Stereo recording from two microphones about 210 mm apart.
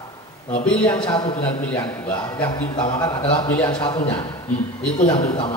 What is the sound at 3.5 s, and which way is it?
Speech, 10° left (ahead or behind).